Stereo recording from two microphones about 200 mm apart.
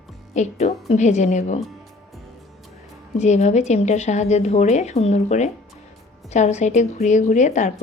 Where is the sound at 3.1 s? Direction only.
35° left (ahead or behind).